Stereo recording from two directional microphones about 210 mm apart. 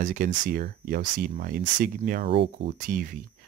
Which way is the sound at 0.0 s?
40° right (ahead or behind).